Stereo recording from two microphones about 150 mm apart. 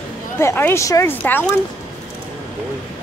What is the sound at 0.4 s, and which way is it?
Speech, 15° left (ahead or behind).